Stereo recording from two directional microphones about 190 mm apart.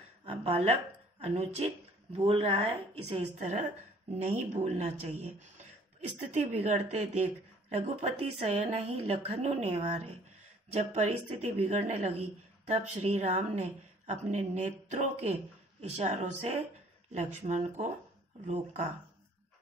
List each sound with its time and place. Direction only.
0.2 s a woman's voice: 30° right (ahead or behind)
5.9 s a woman's voice: 40° right (ahead or behind)